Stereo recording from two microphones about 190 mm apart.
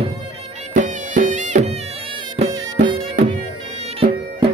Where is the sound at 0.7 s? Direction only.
40° right (ahead or behind).